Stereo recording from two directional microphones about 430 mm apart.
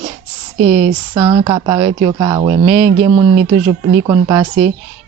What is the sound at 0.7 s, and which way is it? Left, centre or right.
Speech, right.